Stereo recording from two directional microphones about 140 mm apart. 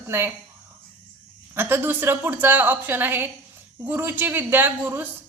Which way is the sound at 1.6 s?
15° right (ahead or behind).